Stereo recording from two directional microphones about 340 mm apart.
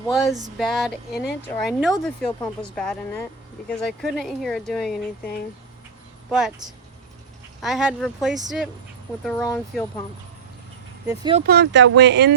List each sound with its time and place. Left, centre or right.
0.6 s speech: centre
7.6 s speech: centre
11.1 s speech: centre
11.4 s speech: right